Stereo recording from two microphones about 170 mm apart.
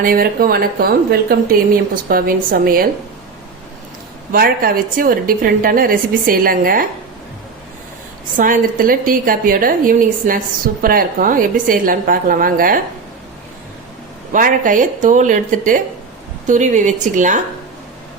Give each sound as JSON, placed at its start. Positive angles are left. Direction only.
{"t": 0.0, "sound": "speech", "side_deg": -60}
{"t": 4.3, "sound": "speech", "side_deg": -60}
{"t": 8.4, "sound": "speech", "side_deg": -55}
{"t": 14.3, "sound": "a woman's voice", "side_deg": -50}